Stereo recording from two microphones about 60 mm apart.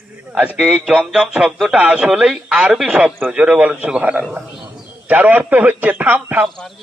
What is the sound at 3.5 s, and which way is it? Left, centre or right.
A man's voice, right.